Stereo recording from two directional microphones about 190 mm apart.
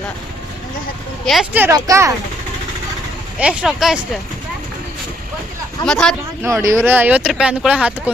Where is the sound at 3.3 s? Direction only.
5° right (ahead or behind).